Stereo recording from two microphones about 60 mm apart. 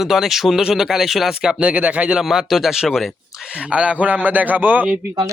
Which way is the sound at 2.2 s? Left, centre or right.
Centre.